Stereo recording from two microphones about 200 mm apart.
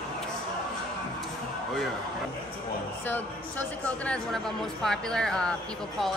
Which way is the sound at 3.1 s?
10° left (ahead or behind).